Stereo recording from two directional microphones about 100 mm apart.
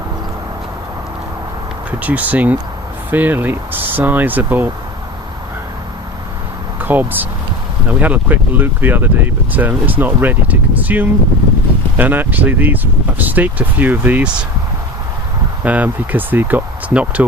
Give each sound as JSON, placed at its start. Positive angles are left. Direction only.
{"t": 2.0, "sound": "speech", "side_deg": -15}
{"t": 6.8, "sound": "speech", "side_deg": -20}
{"t": 15.6, "sound": "speech", "side_deg": -15}